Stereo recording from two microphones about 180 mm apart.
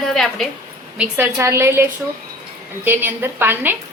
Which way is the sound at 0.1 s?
Centre (ahead or behind).